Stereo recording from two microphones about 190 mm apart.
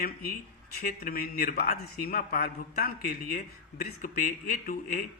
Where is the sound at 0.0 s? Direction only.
50° left (ahead or behind).